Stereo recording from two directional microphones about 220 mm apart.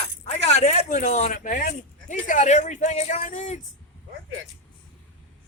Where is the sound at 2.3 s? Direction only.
35° left (ahead or behind).